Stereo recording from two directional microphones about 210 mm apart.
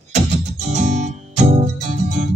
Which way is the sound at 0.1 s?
35° right (ahead or behind).